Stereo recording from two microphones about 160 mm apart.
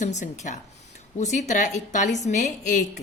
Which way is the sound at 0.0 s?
50° left (ahead or behind).